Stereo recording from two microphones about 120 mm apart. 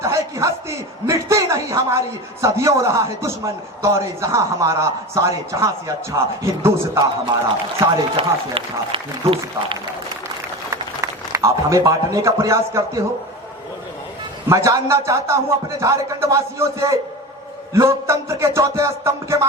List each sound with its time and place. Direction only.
0.0 s a sound: 25° right (ahead or behind)
1.0 s a man's voice: 25° right (ahead or behind)
8.1 s speech: 50° right (ahead or behind)
10.7 s a man's voice: 25° right (ahead or behind)
14.5 s a man's voice: 25° right (ahead or behind)